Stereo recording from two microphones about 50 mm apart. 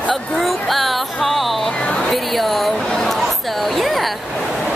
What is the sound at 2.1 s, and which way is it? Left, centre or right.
Speech, centre.